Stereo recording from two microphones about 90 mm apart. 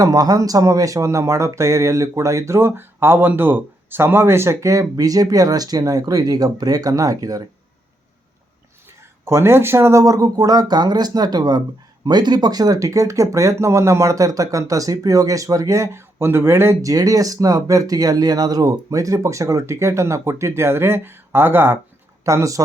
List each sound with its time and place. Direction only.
0.0 s speech: 45° right (ahead or behind)
9.2 s speech: 30° right (ahead or behind)
22.2 s speech: 35° right (ahead or behind)